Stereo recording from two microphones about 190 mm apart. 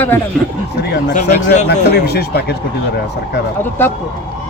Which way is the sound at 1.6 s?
60° left (ahead or behind).